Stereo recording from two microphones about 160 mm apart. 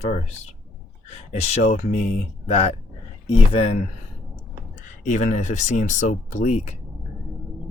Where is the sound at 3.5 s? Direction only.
40° left (ahead or behind).